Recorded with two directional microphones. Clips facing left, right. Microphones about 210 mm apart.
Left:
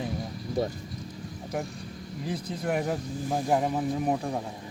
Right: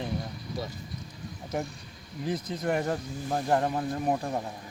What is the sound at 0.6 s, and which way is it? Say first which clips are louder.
Speech: left 9 dB; 50° left (ahead or behind).